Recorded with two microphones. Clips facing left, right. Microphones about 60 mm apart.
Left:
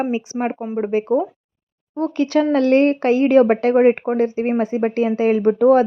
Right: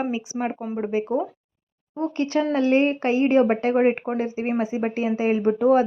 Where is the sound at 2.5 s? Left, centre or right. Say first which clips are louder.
Left 4 dB; left.